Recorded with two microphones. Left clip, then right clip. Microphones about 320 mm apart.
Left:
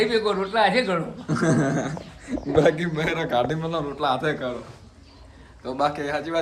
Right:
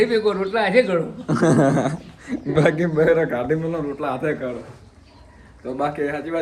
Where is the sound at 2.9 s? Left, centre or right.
Centre.